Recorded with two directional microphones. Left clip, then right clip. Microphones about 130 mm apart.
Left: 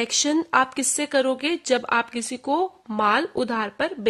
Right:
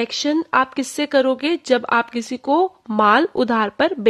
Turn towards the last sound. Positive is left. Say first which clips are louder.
# right 7 dB
turn(degrees=-35)  # may be behind; listen again after turning